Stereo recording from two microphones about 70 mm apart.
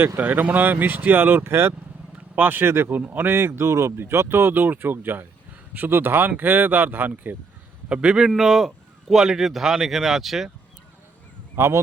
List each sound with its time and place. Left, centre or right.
0.2 s speech: right
2.1 s speech: right
7.9 s a man's voice: centre
8.3 s speech: centre
11.5 s speech: right